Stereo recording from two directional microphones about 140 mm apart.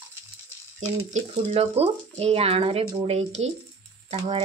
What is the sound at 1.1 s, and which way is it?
Speech, 50° right (ahead or behind).